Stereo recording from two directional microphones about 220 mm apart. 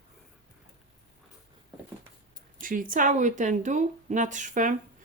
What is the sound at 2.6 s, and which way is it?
Speech, 40° right (ahead or behind).